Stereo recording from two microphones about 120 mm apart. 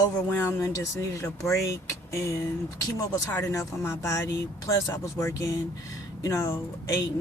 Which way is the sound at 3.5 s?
25° left (ahead or behind).